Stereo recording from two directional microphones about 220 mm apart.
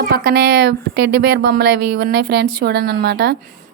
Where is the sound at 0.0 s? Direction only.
40° right (ahead or behind).